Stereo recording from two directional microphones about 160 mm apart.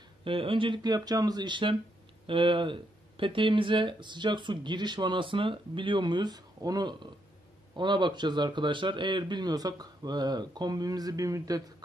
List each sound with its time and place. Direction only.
0.2 s speech: 35° right (ahead or behind)